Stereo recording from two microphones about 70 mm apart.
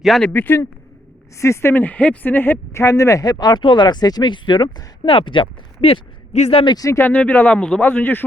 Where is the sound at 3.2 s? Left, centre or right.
Left.